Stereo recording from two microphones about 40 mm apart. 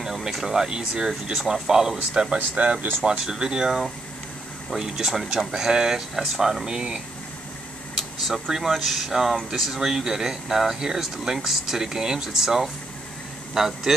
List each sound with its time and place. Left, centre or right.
0.0 s speech: centre
2.2 s speech: right
3.1 s speech: centre
8.3 s speech: centre